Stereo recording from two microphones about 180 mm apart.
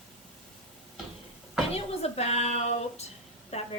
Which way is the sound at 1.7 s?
35° left (ahead or behind).